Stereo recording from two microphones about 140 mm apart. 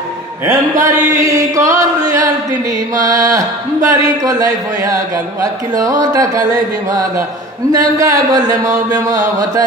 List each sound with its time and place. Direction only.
0.5 s speech: 25° right (ahead or behind)
3.0 s speech: 25° right (ahead or behind)